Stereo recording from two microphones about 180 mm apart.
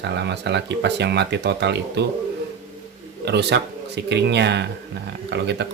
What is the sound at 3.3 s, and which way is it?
Speech, 70° right (ahead or behind).